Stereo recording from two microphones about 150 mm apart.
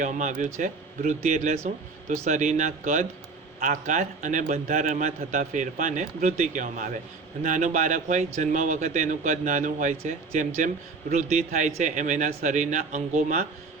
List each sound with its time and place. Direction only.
0.0 s speech: 55° right (ahead or behind)